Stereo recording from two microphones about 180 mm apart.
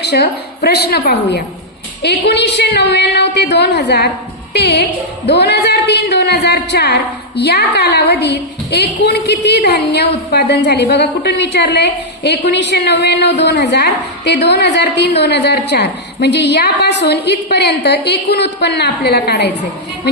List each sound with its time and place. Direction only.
0.0 s a woman's voice: 65° left (ahead or behind)